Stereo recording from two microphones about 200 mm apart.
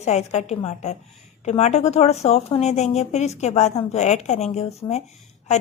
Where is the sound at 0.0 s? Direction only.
35° left (ahead or behind).